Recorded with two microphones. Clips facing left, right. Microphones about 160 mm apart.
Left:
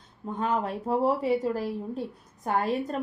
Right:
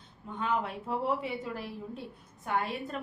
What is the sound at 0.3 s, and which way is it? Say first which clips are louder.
A woman's voice: left 4 dB; 40° left (ahead or behind).